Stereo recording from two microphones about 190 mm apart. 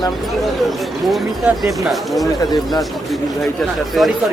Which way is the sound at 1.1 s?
Centre (ahead or behind).